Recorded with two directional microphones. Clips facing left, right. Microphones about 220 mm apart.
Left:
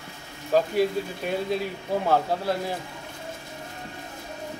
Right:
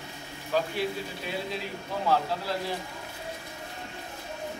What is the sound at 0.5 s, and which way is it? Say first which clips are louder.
Speech: left 7 dB; 45° left (ahead or behind).